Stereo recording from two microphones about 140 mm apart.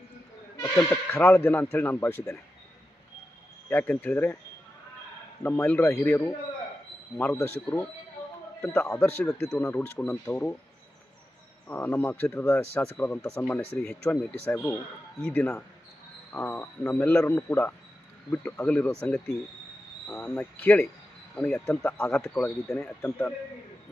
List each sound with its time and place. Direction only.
0.8 s speech: 15° left (ahead or behind)
3.7 s speech: 10° left (ahead or behind)
5.4 s speech: 10° left (ahead or behind)
7.3 s speech: 15° left (ahead or behind)
11.7 s speech: 15° left (ahead or behind)
20.1 s speech: 15° left (ahead or behind)